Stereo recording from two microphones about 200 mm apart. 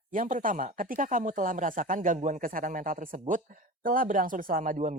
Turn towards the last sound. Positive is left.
turn(degrees=-40)  # may be behind; listen again after turning